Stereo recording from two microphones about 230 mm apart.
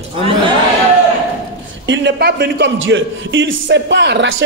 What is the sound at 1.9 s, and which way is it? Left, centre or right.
Speech, right.